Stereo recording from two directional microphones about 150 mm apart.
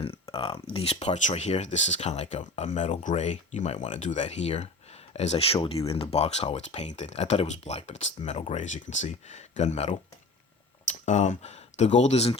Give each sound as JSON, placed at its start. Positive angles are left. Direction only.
{"t": 0.0, "sound": "speech", "side_deg": 40}